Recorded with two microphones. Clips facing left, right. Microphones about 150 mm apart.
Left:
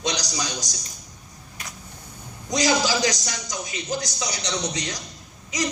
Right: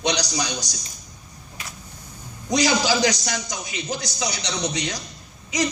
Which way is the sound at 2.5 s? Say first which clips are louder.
Right 2 dB; 65° right (ahead or behind).